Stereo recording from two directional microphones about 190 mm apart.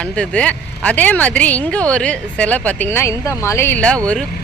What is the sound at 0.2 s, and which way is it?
Speech, 5° left (ahead or behind).